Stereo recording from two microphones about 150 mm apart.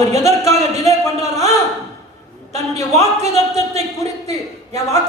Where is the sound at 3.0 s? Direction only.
50° right (ahead or behind).